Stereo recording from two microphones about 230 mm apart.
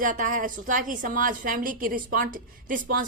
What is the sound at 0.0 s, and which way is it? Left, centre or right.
A woman's voice, right.